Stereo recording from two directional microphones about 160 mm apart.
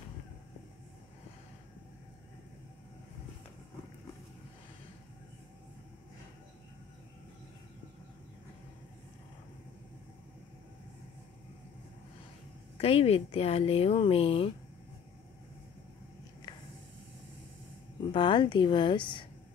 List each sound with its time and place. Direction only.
12.7 s speech: 35° left (ahead or behind)
18.1 s speech: 30° left (ahead or behind)